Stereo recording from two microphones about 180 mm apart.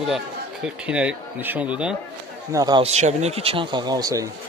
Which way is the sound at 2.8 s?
40° right (ahead or behind).